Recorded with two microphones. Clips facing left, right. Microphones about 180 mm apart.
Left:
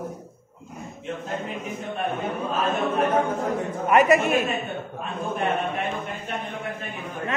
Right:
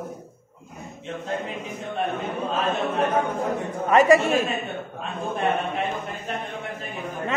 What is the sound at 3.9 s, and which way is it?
Speech, 35° right (ahead or behind).